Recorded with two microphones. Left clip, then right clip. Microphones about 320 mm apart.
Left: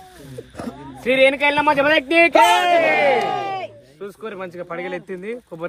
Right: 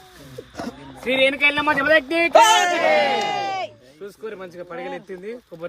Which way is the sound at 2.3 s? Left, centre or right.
Right.